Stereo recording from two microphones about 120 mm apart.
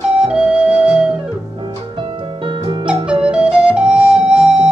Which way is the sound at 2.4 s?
40° right (ahead or behind).